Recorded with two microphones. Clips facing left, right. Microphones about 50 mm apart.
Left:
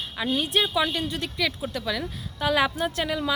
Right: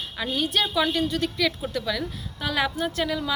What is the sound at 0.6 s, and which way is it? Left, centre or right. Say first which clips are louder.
A woman's voice: right 2 dB; centre.